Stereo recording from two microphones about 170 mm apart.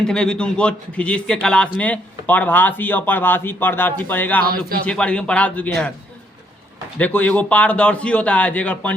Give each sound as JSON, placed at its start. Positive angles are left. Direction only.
{"t": 0.0, "sound": "a man's voice", "side_deg": 5}
{"t": 4.4, "sound": "speech", "side_deg": -60}
{"t": 4.9, "sound": "a man's voice", "side_deg": 5}
{"t": 7.0, "sound": "a man's voice", "side_deg": 10}